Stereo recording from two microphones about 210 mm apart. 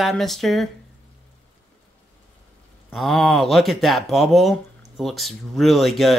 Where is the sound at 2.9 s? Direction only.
Centre (ahead or behind).